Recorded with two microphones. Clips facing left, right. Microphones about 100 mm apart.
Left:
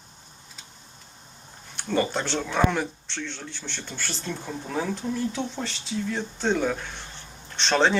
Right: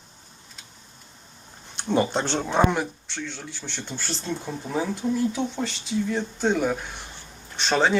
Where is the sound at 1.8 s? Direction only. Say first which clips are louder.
Right 2 dB; 20° right (ahead or behind).